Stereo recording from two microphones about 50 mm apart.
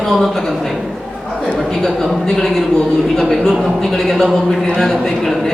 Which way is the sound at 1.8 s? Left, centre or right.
Centre.